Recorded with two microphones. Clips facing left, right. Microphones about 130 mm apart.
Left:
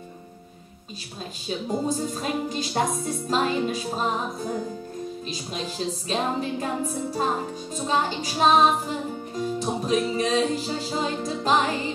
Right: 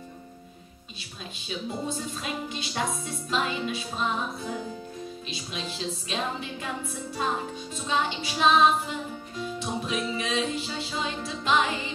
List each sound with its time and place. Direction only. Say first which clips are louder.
1.5 s music: left 6 dB; 40° left (ahead or behind)